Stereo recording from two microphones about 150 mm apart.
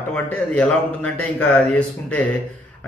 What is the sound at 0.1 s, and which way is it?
A man's voice, 10° left (ahead or behind).